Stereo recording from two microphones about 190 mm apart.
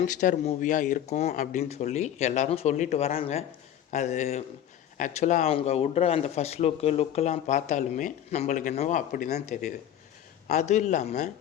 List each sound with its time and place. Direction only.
0.0 s speech: 40° left (ahead or behind)